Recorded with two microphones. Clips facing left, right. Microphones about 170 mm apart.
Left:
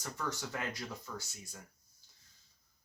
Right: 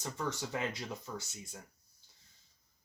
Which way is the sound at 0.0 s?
20° right (ahead or behind).